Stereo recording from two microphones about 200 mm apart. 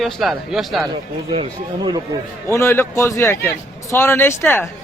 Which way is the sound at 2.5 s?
15° left (ahead or behind).